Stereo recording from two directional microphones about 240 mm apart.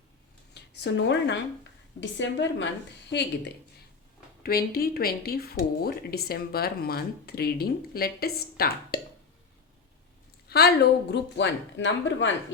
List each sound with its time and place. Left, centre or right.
0.5 s a woman's voice: left
10.5 s a woman's voice: left